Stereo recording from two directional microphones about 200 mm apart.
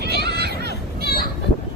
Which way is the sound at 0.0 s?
55° right (ahead or behind).